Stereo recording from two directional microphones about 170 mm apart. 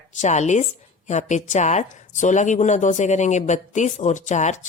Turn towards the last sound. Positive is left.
turn(degrees=45)  # may be behind; listen again after turning